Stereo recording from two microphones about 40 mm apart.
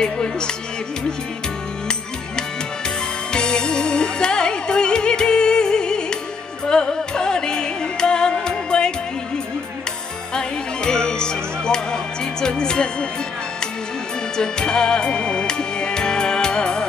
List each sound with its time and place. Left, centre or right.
0.0 s music: left
3.3 s music: left
10.3 s music: centre
14.3 s music: centre